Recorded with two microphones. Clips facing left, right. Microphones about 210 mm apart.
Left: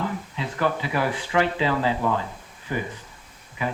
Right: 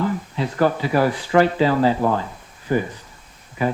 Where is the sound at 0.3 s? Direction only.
40° right (ahead or behind).